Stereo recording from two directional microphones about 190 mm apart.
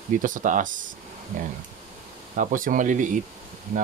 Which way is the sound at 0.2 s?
45° right (ahead or behind).